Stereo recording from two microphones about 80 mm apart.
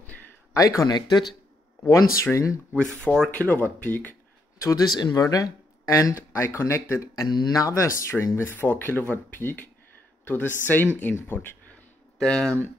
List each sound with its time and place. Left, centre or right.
0.5 s speech: left
2.2 s speech: left
2.7 s speech: centre
3.3 s speech: centre
4.6 s speech: left
7.2 s speech: left
7.5 s speech: left
12.2 s speech: centre